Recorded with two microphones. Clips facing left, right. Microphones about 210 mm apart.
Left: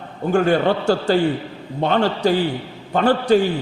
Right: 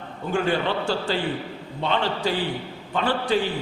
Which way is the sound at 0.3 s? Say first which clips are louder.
Left 7 dB; 45° left (ahead or behind).